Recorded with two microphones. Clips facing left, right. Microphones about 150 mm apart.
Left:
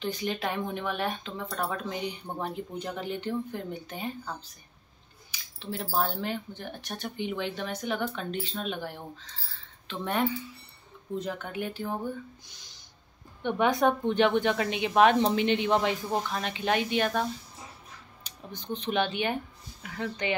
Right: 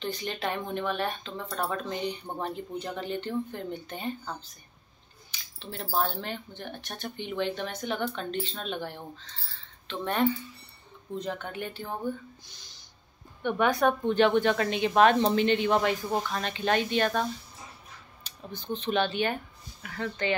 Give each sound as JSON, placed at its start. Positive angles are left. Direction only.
{"t": 0.0, "sound": "speech", "side_deg": 10}
{"t": 5.6, "sound": "speech", "side_deg": 5}
{"t": 13.4, "sound": "speech", "side_deg": 20}
{"t": 16.2, "sound": "speech", "side_deg": 10}